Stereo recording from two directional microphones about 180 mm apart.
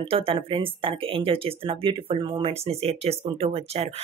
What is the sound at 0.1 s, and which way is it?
Speech, 30° right (ahead or behind).